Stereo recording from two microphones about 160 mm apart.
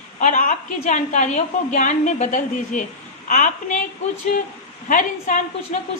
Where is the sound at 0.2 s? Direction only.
50° left (ahead or behind).